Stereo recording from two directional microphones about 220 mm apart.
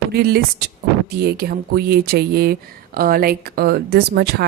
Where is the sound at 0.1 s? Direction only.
45° right (ahead or behind).